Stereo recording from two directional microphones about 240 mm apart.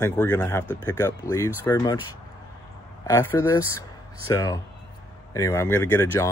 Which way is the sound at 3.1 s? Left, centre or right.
Centre.